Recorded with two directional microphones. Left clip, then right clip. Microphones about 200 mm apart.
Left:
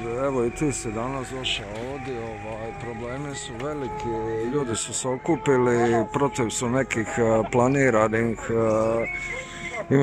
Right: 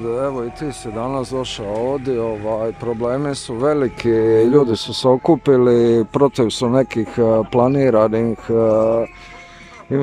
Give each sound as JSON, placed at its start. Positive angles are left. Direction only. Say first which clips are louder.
{"t": 0.1, "sound": "speech", "louder": "right 5 dB", "side_deg": -5}
{"t": 1.1, "sound": "speech", "louder": "right 5 dB", "side_deg": -30}
{"t": 2.0, "sound": "speech", "louder": "right 12 dB", "side_deg": -45}
{"t": 4.5, "sound": "speech", "louder": "right 12 dB", "side_deg": -35}
{"t": 5.2, "sound": "speech", "louder": "right 8 dB", "side_deg": -20}